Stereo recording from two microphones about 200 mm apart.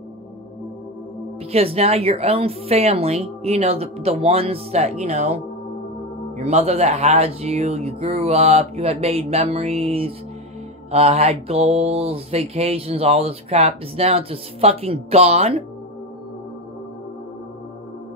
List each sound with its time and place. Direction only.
1.5 s mantra: 30° right (ahead or behind)